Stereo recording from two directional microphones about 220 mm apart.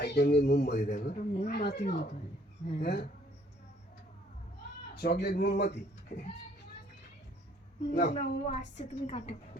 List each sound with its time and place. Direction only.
0.0 s speech: 50° left (ahead or behind)
4.9 s speech: 45° left (ahead or behind)
7.9 s a woman's voice: 40° left (ahead or behind)